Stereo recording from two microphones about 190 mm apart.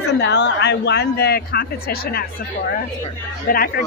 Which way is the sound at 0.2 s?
65° left (ahead or behind).